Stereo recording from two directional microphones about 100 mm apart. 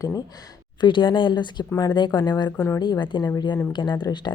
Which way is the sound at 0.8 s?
55° left (ahead or behind).